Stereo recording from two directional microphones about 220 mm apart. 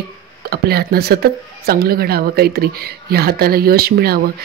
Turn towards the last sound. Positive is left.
turn(degrees=-45)  # may be behind; listen again after turning